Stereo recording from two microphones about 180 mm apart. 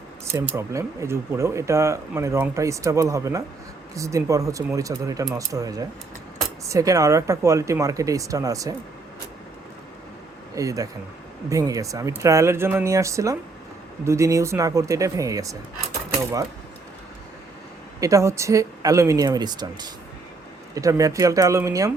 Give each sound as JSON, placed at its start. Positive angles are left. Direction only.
{"t": 0.3, "sound": "speech", "side_deg": -15}
{"t": 10.5, "sound": "speech", "side_deg": -20}
{"t": 18.0, "sound": "speech", "side_deg": -15}